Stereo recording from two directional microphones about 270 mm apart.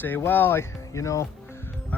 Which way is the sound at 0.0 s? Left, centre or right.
Centre.